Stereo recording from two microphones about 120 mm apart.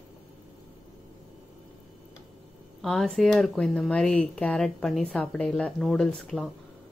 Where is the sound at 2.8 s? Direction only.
Centre (ahead or behind).